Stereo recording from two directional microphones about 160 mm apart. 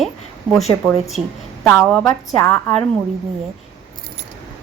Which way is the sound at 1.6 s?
5° left (ahead or behind).